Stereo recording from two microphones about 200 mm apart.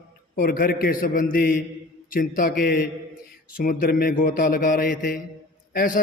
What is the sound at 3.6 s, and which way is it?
A man's voice, 50° left (ahead or behind).